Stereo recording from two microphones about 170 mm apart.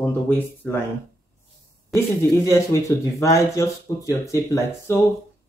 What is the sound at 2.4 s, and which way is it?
Speech, 20° left (ahead or behind).